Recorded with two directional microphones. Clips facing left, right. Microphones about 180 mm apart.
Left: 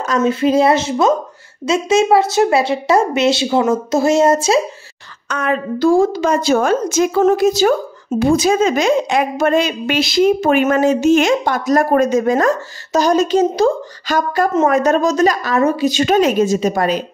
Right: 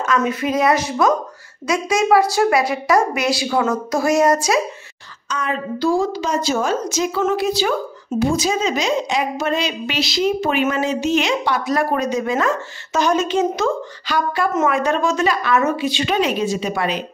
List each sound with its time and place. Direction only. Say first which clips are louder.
0.0 s a woman's voice: left 4 dB; 30° left (ahead or behind)
5.3 s a woman's voice: left 5 dB; 60° left (ahead or behind)
8.2 s a woman's voice: left 6 dB; 55° left (ahead or behind)